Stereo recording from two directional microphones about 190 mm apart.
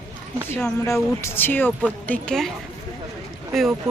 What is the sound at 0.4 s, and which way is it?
Speech, 10° left (ahead or behind).